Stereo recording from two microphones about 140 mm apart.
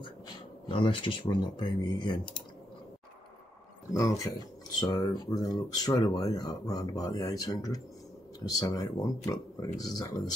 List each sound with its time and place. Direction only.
0.7 s speech: 40° left (ahead or behind)
3.9 s speech: 25° left (ahead or behind)